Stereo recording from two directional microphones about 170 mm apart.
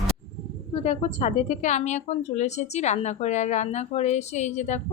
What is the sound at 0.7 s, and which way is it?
Speech, 40° left (ahead or behind).